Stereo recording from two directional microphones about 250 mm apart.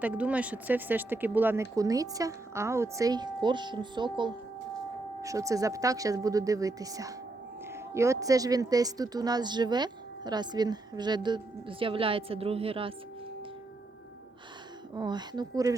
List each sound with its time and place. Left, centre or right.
0.0 s speech: centre; by 12.9 s right
14.9 s speech: centre